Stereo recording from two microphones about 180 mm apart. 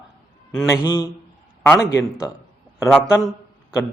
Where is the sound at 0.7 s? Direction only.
20° left (ahead or behind).